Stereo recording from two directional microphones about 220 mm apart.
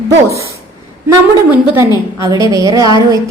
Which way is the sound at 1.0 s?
10° right (ahead or behind).